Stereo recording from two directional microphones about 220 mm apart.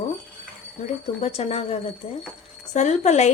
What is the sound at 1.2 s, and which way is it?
A woman's voice, 30° left (ahead or behind).